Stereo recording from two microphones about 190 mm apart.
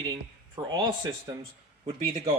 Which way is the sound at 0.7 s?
25° right (ahead or behind).